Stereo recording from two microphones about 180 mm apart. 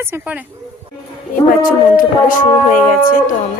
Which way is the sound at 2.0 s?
50° left (ahead or behind).